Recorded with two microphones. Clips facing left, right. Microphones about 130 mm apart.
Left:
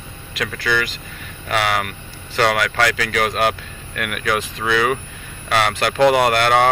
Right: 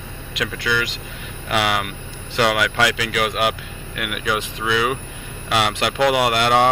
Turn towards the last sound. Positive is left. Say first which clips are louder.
# left 1 dB
turn(degrees=-15)  # may be behind; listen again after turning